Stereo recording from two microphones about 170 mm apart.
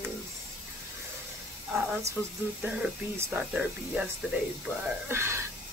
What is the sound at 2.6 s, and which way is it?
Speech, 10° right (ahead or behind).